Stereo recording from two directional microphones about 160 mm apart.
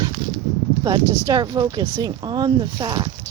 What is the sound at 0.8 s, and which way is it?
Speech, 25° right (ahead or behind).